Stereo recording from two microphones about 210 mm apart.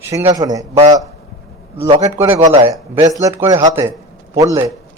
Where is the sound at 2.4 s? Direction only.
25° right (ahead or behind).